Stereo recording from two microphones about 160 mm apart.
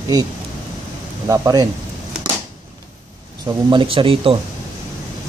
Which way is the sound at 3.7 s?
30° right (ahead or behind).